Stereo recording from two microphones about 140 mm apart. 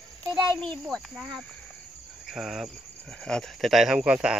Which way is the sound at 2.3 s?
Centre (ahead or behind).